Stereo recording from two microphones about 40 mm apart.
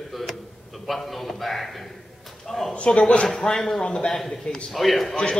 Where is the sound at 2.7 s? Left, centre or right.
Left.